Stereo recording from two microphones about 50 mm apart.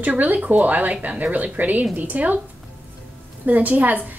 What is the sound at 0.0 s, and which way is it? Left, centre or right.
A woman's voice, right.